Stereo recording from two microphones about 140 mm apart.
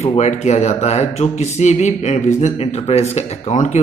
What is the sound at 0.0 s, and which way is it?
A man's voice, 50° left (ahead or behind).